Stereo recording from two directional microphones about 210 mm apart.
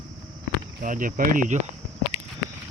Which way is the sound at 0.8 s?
40° right (ahead or behind).